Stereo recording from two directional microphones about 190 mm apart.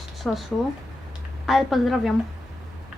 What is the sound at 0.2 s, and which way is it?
Speech, centre (ahead or behind).